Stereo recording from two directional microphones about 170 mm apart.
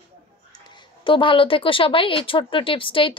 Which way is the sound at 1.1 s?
30° left (ahead or behind).